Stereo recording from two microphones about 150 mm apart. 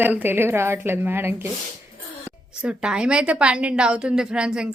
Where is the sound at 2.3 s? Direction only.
10° right (ahead or behind).